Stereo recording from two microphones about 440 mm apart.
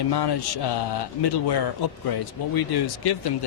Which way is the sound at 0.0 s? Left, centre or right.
Left.